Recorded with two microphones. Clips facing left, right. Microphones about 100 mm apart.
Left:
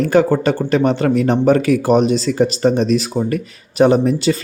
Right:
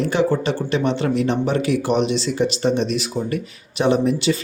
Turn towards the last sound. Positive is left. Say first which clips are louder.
# left 4 dB
turn(degrees=40)  # may be behind; listen again after turning